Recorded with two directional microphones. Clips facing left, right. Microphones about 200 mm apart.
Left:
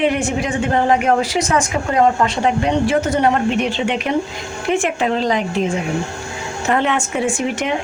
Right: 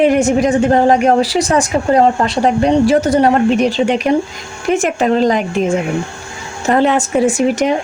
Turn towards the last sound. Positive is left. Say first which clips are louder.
# right 7 dB
turn(degrees=-40)  # may be behind; listen again after turning